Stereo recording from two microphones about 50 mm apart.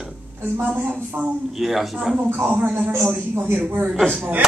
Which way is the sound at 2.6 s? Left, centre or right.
Right.